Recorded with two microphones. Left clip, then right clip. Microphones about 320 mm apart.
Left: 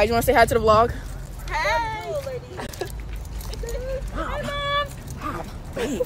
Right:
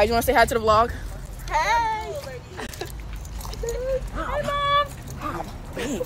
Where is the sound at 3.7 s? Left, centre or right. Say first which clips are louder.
Right 3 dB; centre.